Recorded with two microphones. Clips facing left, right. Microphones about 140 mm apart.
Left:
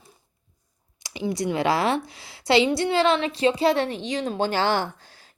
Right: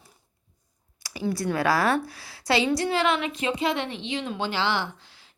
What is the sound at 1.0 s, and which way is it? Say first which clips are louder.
Speech: left 1 dB; 20° left (ahead or behind).